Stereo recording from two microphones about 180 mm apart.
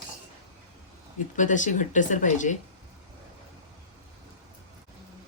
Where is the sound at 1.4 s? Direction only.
45° left (ahead or behind).